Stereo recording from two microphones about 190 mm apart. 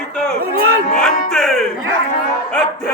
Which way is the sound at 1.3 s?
Centre (ahead or behind).